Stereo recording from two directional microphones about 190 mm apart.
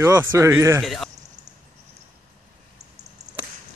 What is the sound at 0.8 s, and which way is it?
Speech, centre (ahead or behind).